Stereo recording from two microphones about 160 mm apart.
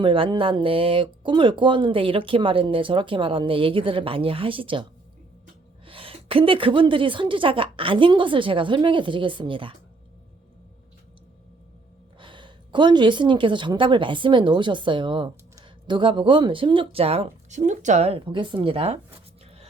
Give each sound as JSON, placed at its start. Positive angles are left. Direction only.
{"t": 0.0, "sound": "speech", "side_deg": -30}
{"t": 12.2, "sound": "speech", "side_deg": -30}